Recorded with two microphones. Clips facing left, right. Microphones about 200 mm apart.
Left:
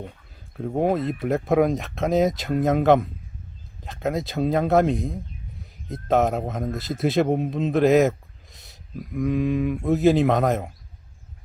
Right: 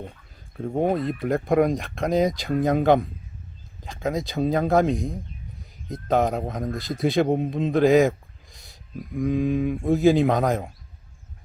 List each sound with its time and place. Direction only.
0.8 s a man's voice: centre (ahead or behind)